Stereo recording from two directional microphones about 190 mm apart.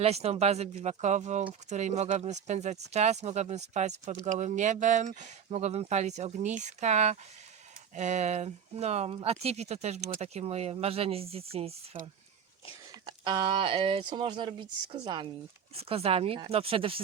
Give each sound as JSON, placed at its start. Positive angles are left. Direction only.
{"t": 0.0, "sound": "speech", "side_deg": -35}
{"t": 13.1, "sound": "speech", "side_deg": -25}